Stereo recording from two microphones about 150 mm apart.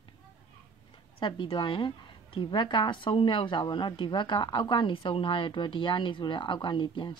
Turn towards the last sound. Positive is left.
turn(degrees=30)  # may be behind; listen again after turning